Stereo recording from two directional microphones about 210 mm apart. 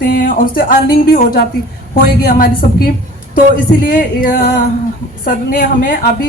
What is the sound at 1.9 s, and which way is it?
Speech, 45° left (ahead or behind).